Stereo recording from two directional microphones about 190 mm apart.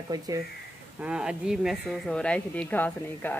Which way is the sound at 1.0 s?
5° right (ahead or behind).